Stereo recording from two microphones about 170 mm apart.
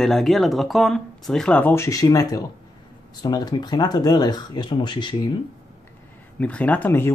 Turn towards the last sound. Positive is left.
turn(degrees=15)  # may be behind; listen again after turning